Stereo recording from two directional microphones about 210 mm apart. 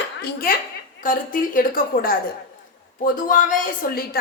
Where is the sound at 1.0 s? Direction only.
40° left (ahead or behind).